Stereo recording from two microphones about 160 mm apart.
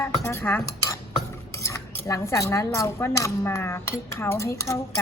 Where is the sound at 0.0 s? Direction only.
15° left (ahead or behind).